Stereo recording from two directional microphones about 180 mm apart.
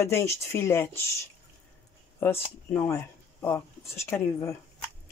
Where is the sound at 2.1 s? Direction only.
10° left (ahead or behind).